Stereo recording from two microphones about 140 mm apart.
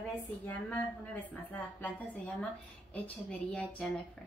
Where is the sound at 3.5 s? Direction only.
10° left (ahead or behind).